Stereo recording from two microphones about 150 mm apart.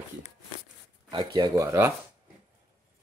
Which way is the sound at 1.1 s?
30° right (ahead or behind).